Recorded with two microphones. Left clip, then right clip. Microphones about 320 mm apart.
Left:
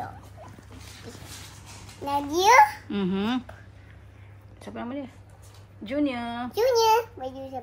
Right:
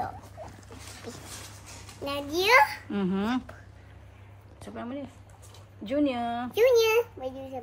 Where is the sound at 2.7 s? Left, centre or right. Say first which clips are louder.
Left 1 dB; centre.